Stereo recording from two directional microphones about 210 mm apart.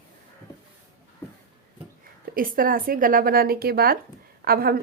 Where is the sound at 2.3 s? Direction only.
40° right (ahead or behind).